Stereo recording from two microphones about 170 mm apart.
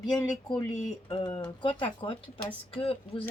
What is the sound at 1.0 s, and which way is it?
Speech, 30° left (ahead or behind).